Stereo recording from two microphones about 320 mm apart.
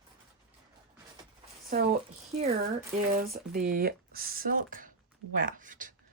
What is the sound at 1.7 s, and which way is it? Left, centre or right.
Speech, right.